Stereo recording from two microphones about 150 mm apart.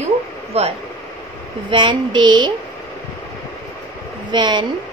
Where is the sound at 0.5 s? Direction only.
45° right (ahead or behind).